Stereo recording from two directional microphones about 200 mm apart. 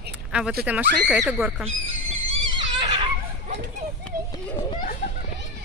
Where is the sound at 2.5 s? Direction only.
20° right (ahead or behind).